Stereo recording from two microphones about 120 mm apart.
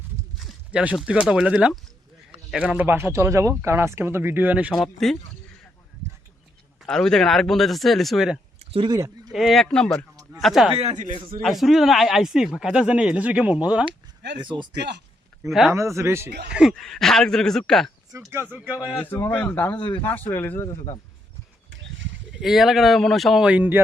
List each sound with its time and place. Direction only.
0.3 s speech: 5° right (ahead or behind)
6.8 s speech: 5° left (ahead or behind)
8.5 s a sound: 50° right (ahead or behind)
8.9 s speech: 30° right (ahead or behind)
9.3 s speech: centre (ahead or behind)
10.8 s a man's voice: 75° right (ahead or behind)
11.4 s speech: centre (ahead or behind)
14.3 s speech: 40° right (ahead or behind)
15.4 s speech: centre (ahead or behind)
15.7 s speech: 25° right (ahead or behind)
16.5 s speech: 5° right (ahead or behind)
18.3 s speech: 20° right (ahead or behind)
19.4 s speech: 20° left (ahead or behind)
22.3 s speech: 5° right (ahead or behind)